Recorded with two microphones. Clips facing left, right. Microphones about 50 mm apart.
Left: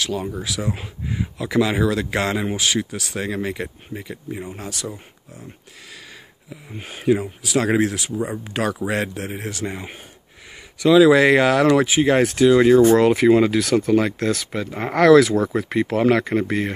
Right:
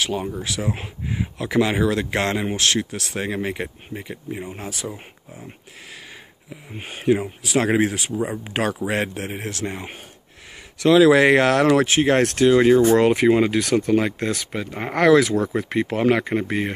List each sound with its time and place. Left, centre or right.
0.4 s speech: centre
0.7 s speech: centre
3.4 s speech: centre
6.5 s speech: centre
12.4 s speech: centre
13.6 s speech: centre